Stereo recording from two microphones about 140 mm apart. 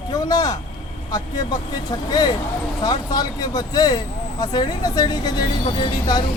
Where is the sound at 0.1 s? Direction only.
30° left (ahead or behind).